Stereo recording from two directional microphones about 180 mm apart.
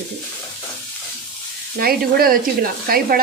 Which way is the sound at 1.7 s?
55° right (ahead or behind).